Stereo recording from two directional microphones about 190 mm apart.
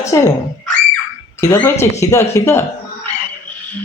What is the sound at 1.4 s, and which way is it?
Speech, 10° left (ahead or behind).